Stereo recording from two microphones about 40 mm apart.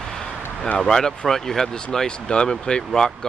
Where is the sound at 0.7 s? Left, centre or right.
Centre.